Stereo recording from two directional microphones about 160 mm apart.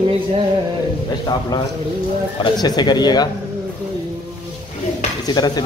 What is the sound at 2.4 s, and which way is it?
Speech, 25° left (ahead or behind).